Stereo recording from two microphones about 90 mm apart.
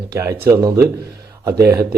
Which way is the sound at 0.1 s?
30° right (ahead or behind).